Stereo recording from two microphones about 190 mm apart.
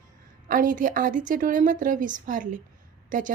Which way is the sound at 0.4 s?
45° right (ahead or behind).